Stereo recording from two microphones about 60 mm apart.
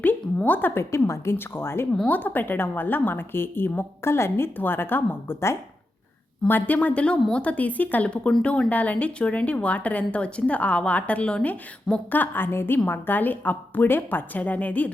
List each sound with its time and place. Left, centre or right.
0.4 s a woman's voice: left
0.7 s a woman's voice: left
2.0 s a woman's voice: left
6.5 s a woman's voice: left
12.1 s a woman's voice: left